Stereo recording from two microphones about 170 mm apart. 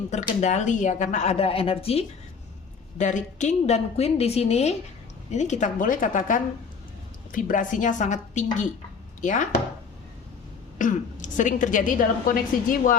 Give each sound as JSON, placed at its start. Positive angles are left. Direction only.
{"t": 0.1, "sound": "a woman's voice", "side_deg": 45}
{"t": 3.0, "sound": "a woman's voice", "side_deg": 45}
{"t": 10.8, "sound": "a woman's voice", "side_deg": 50}